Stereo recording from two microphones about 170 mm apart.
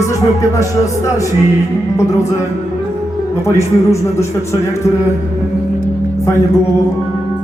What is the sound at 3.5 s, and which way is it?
Speech, 15° left (ahead or behind).